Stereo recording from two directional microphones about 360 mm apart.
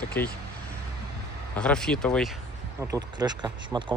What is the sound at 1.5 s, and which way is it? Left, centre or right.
Speech, centre.